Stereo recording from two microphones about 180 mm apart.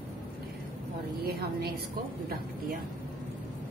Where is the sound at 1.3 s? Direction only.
60° right (ahead or behind).